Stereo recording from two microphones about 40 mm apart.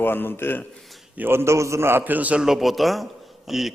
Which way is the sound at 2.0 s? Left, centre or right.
Right.